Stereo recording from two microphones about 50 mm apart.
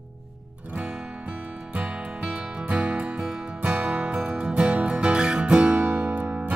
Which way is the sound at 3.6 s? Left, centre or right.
Right.